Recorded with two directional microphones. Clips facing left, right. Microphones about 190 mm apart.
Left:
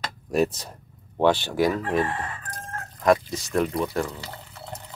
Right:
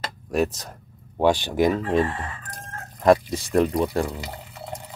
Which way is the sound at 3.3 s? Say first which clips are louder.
Right 4 dB; 30° right (ahead or behind).